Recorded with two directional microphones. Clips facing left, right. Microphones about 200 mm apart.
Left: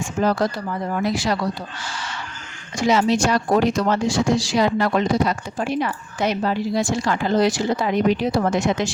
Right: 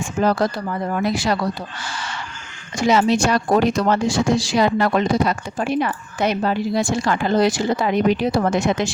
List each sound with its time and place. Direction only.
1.0 s speech: 60° right (ahead or behind)
2.8 s speech: 60° right (ahead or behind)